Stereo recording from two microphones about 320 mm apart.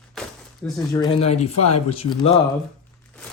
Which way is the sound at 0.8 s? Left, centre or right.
Centre.